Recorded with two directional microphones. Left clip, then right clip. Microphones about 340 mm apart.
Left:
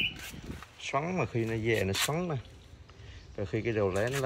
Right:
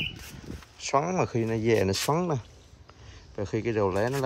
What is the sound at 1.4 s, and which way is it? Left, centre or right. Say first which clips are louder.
Speech: right 5 dB; right.